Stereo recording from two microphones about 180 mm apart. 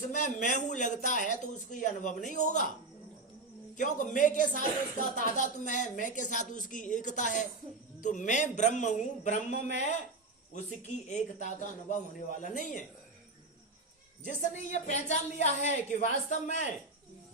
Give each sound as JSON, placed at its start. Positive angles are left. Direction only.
{"t": 0.1, "sound": "speech", "side_deg": 45}
{"t": 3.8, "sound": "speech", "side_deg": 45}
{"t": 11.1, "sound": "speech", "side_deg": 40}
{"t": 14.3, "sound": "a woman's voice", "side_deg": 40}